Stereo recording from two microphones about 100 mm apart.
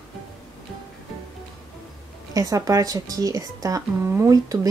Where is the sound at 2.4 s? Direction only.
35° right (ahead or behind).